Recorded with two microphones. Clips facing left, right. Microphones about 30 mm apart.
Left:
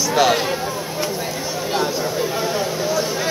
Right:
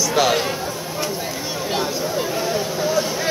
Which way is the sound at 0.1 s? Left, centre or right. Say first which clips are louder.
Left 3 dB; centre.